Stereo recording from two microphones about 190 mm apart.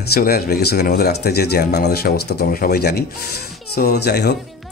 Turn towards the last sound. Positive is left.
turn(degrees=60)  # may be behind; listen again after turning